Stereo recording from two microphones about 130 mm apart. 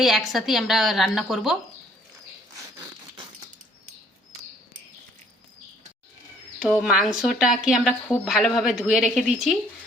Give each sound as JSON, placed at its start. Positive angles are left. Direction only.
{"t": 0.0, "sound": "a woman's voice", "side_deg": 0}
{"t": 6.6, "sound": "a woman's voice", "side_deg": -5}